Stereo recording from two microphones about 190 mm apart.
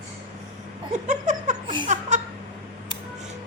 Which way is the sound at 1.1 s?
40° right (ahead or behind).